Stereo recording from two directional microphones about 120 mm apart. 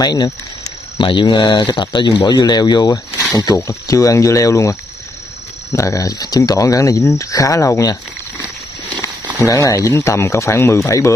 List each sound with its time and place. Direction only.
0.0 s speech: 35° left (ahead or behind)
9.4 s speech: 25° left (ahead or behind)